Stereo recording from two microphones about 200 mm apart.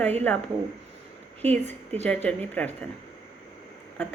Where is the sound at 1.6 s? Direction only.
35° right (ahead or behind).